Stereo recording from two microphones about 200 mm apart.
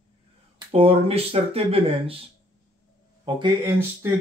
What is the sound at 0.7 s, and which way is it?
Speech, 30° right (ahead or behind).